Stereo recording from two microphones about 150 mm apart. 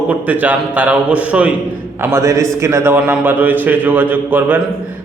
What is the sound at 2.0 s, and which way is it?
A man's voice, 20° right (ahead or behind).